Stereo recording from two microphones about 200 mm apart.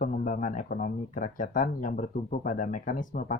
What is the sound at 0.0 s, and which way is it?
Speech, 40° left (ahead or behind).